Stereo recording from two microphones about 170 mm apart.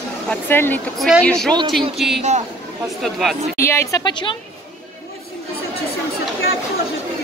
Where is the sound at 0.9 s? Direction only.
Centre (ahead or behind).